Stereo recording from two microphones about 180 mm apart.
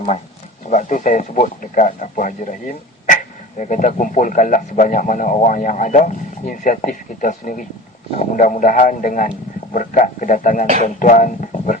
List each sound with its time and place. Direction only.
0.7 s speech: 45° left (ahead or behind)